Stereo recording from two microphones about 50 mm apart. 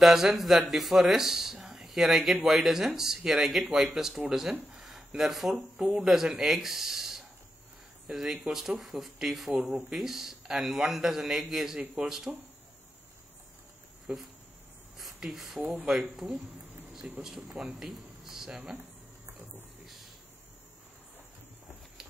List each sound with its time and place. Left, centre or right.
0.0 s speech: centre
5.8 s speech: centre
9.5 s a man's voice: centre
9.9 s a man's voice: centre
12.3 s speech: centre
14.1 s speech: right
15.1 s a man's voice: centre
17.0 s speech: right
17.6 s speech: centre